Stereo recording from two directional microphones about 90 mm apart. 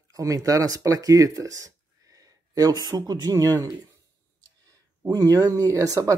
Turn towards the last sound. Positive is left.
turn(degrees=-35)  # may be behind; listen again after turning